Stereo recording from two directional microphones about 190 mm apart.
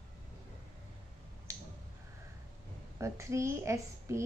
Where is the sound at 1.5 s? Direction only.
15° right (ahead or behind).